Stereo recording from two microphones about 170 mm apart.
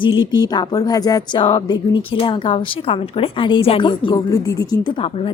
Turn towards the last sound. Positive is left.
turn(degrees=30)  # may be behind; listen again after turning